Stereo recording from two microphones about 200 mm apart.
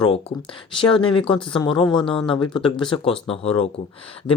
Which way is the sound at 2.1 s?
5° left (ahead or behind).